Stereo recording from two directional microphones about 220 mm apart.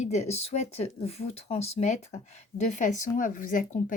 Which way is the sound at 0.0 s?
30° left (ahead or behind).